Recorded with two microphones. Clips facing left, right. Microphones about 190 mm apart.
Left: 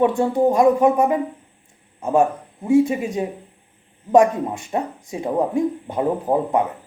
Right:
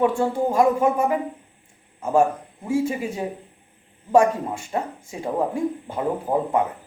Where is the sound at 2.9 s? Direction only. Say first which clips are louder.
Left 4 dB; 25° left (ahead or behind).